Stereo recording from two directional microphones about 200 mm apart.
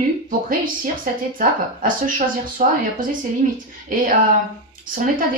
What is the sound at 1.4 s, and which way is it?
Speech, 45° right (ahead or behind).